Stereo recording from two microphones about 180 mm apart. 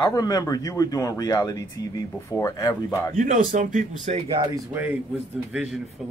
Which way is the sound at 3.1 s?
45° right (ahead or behind).